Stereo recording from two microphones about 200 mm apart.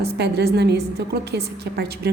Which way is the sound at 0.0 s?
55° right (ahead or behind).